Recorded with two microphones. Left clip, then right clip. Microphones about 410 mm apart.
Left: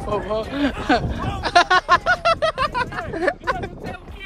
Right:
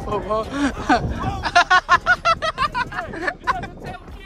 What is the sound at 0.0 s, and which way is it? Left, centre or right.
Speech, centre.